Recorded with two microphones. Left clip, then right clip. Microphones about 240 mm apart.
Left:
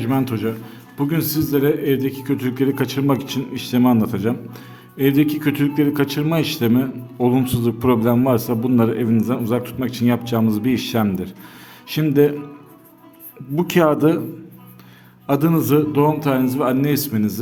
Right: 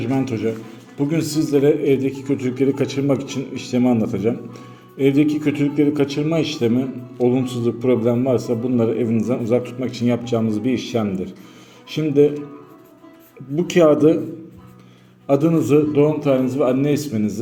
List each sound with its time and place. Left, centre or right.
0.0 s a man's voice: left
13.6 s a man's voice: left
15.3 s a man's voice: left